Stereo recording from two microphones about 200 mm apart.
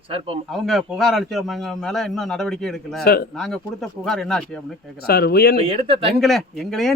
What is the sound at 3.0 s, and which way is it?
Speech, 50° left (ahead or behind).